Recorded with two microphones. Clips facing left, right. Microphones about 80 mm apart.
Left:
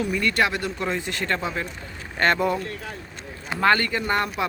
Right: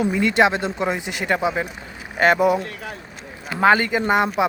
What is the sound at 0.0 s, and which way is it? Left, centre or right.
Speech, centre.